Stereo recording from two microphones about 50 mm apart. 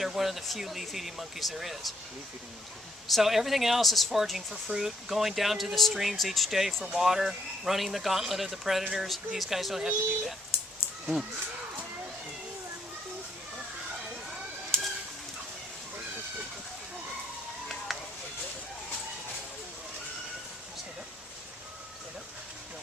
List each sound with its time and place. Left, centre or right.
0.0 s speech: centre
3.1 s speech: centre
11.0 s speech: centre
17.9 s a sound: centre